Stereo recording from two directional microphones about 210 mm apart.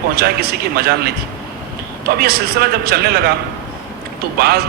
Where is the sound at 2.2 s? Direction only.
50° right (ahead or behind).